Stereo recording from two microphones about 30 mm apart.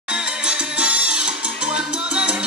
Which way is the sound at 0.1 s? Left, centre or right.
Right.